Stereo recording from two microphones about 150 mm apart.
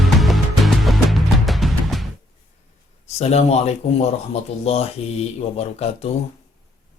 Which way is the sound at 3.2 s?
45° left (ahead or behind).